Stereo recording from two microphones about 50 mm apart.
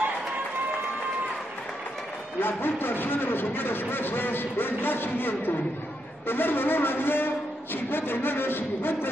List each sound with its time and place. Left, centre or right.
2.4 s a man's voice: left